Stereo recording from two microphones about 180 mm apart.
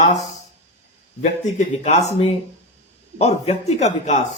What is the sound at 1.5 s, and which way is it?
A man's voice, 40° left (ahead or behind).